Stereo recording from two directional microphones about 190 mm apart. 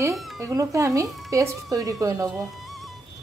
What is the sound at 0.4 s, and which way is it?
A woman's voice, 15° right (ahead or behind).